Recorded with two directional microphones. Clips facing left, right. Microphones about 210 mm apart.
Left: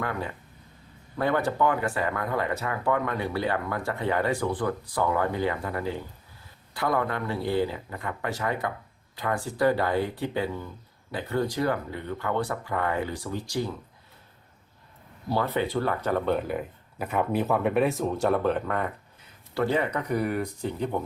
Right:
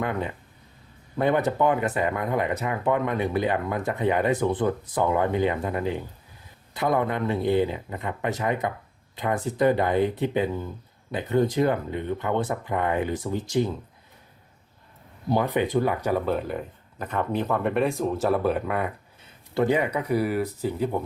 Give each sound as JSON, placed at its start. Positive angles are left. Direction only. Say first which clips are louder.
{"t": 0.0, "sound": "speech", "louder": "right 3 dB", "side_deg": -20}
{"t": 15.3, "sound": "speech", "louder": "right 3 dB", "side_deg": -15}